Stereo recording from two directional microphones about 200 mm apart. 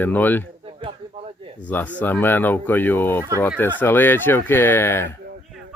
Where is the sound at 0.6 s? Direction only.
25° right (ahead or behind).